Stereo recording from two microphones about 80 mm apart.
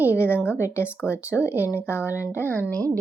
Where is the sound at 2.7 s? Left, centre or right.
Centre.